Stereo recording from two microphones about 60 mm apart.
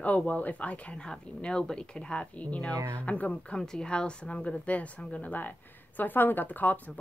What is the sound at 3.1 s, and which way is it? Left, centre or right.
Speech, left.